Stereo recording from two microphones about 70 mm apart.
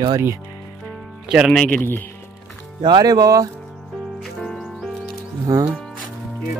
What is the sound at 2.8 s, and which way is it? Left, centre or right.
Speech, right.